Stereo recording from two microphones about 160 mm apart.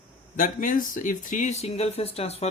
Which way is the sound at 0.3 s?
55° left (ahead or behind).